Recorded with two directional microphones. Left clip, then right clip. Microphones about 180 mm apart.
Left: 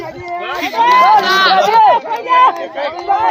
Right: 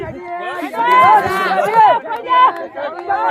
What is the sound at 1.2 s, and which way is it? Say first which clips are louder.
Run: left 6 dB; 65° right (ahead or behind).